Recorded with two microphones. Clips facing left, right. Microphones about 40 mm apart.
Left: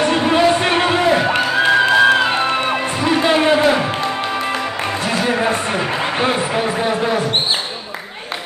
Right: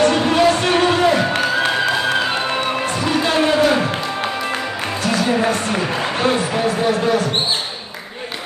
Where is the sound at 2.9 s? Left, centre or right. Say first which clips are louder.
Left 3 dB; left.